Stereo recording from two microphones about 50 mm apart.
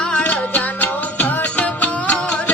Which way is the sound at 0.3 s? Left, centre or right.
Left.